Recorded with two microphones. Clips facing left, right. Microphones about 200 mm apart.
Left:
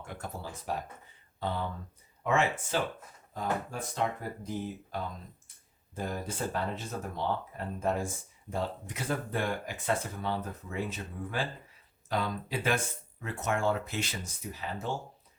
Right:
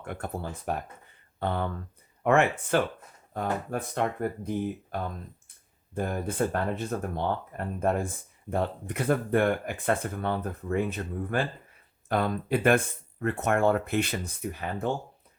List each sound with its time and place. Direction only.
0.0 s speech: 55° right (ahead or behind)